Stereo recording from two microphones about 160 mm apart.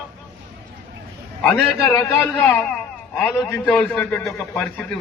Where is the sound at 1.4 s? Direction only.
5° left (ahead or behind).